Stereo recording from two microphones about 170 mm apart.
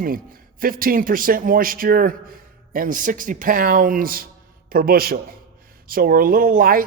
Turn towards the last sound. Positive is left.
turn(degrees=-55)  # may be behind; listen again after turning